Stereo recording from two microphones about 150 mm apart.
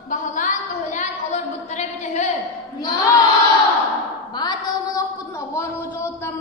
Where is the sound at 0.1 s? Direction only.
60° left (ahead or behind).